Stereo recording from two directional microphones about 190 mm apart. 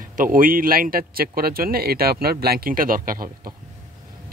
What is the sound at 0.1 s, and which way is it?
Speech, 45° right (ahead or behind).